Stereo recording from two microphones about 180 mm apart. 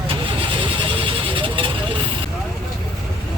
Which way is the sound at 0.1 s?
30° right (ahead or behind).